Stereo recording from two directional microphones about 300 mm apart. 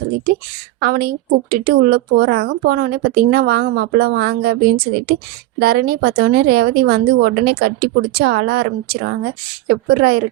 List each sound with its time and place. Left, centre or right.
0.8 s speech: right
5.5 s speech: right